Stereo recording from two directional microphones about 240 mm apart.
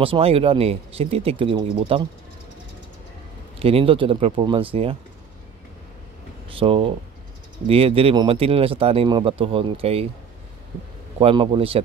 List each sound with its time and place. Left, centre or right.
0.0 s speech: right
3.5 s speech: right
6.5 s speech: right
11.1 s speech: right